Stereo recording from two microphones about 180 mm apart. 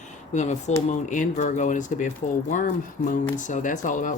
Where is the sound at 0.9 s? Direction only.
45° left (ahead or behind).